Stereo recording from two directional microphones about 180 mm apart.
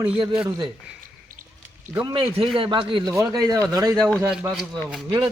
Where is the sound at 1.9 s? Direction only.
25° right (ahead or behind).